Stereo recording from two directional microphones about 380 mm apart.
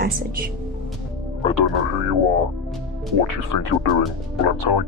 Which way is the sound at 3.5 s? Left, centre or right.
Left.